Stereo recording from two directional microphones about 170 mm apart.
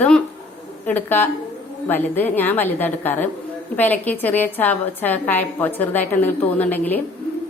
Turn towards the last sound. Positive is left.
turn(degrees=10)  # may be behind; listen again after turning